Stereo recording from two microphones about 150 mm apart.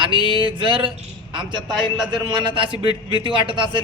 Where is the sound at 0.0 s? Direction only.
35° right (ahead or behind).